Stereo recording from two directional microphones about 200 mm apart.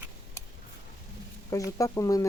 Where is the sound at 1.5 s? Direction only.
15° left (ahead or behind).